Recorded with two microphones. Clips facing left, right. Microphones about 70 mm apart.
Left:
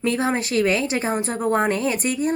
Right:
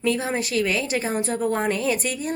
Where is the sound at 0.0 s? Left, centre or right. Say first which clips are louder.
Left 2 dB; left.